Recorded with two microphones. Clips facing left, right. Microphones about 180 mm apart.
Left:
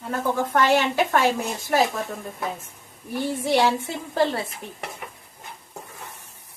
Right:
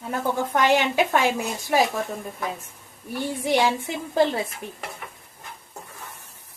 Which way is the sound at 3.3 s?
15° right (ahead or behind).